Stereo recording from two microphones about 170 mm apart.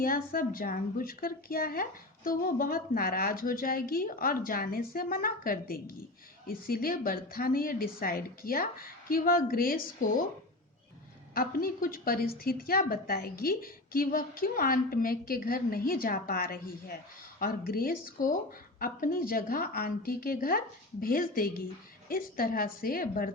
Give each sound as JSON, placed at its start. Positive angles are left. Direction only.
{"t": 0.0, "sound": "a woman's voice", "side_deg": 60}
{"t": 11.3, "sound": "a woman's voice", "side_deg": 60}